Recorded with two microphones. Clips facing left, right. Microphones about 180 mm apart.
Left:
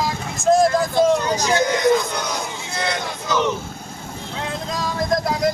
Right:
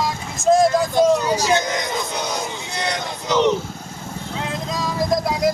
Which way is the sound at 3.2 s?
20° right (ahead or behind).